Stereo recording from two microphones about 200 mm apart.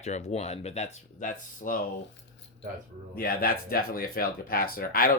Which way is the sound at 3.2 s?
45° left (ahead or behind).